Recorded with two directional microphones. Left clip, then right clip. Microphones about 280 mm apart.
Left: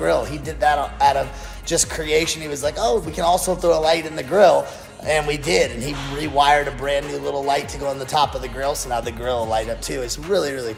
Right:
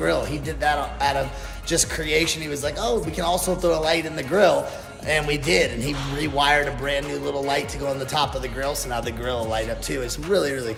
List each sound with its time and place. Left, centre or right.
0.0 s speech: centre